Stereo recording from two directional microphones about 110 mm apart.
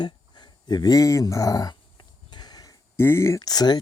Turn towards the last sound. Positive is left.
turn(degrees=40)  # may be behind; listen again after turning